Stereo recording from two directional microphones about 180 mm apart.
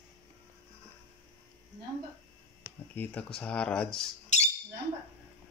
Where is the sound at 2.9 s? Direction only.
10° left (ahead or behind).